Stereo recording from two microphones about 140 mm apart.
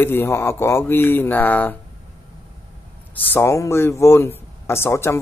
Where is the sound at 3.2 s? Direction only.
15° left (ahead or behind).